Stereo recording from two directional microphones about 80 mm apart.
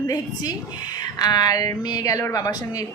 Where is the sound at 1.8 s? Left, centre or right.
Left.